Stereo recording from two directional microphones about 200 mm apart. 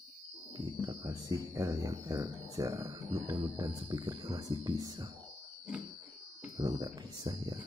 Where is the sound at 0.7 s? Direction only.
20° right (ahead or behind).